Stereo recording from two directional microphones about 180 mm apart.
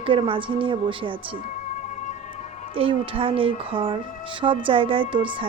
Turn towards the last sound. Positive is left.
turn(degrees=-30)  # may be behind; listen again after turning